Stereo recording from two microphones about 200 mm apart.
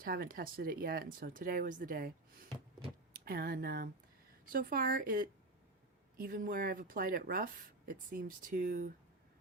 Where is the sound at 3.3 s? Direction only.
50° right (ahead or behind).